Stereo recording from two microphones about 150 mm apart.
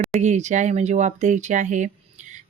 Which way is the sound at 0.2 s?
50° right (ahead or behind).